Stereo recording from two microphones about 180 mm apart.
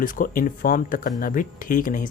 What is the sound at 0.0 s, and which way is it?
Speech, 50° left (ahead or behind).